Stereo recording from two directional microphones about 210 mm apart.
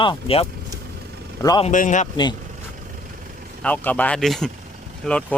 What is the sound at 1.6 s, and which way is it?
Speech, 35° left (ahead or behind).